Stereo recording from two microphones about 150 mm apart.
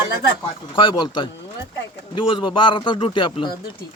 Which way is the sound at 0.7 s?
35° left (ahead or behind).